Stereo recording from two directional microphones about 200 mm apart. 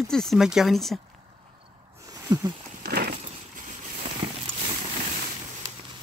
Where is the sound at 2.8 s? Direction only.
50° right (ahead or behind).